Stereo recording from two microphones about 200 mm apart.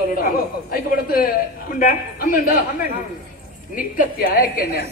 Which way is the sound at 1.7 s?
45° left (ahead or behind).